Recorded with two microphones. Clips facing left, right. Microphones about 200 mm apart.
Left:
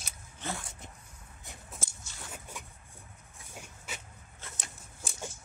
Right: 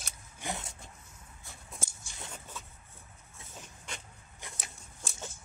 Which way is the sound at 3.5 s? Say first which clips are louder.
Left 1 dB; 10° left (ahead or behind).